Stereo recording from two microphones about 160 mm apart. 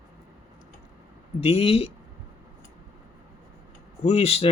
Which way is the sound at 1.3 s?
40° left (ahead or behind).